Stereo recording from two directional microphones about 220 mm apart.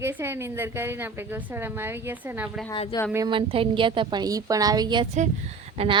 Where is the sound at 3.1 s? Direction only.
20° right (ahead or behind).